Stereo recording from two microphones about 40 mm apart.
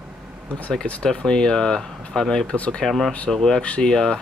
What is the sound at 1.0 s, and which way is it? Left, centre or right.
Speech, left.